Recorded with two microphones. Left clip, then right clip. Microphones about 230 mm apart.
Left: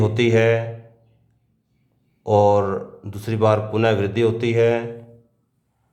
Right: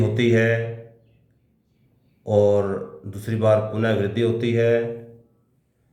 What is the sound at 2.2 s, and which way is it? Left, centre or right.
A man's voice, left.